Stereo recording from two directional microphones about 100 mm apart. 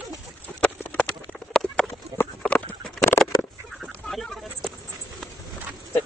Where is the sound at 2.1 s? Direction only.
35° right (ahead or behind).